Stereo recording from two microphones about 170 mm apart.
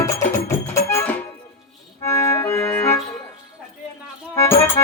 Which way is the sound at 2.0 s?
15° left (ahead or behind).